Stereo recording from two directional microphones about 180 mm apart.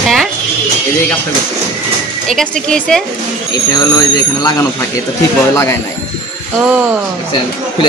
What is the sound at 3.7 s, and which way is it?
Speech, 20° left (ahead or behind).